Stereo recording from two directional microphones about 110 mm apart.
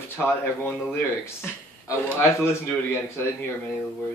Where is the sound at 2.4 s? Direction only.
25° left (ahead or behind).